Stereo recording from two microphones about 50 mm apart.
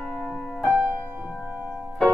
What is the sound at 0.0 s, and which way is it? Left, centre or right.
Music, centre.